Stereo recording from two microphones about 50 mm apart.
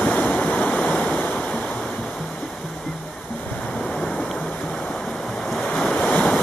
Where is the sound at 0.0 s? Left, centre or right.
Left.